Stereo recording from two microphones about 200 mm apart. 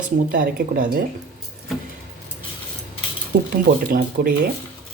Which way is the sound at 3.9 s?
45° right (ahead or behind).